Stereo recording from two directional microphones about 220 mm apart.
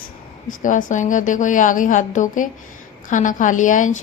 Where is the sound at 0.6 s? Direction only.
35° left (ahead or behind).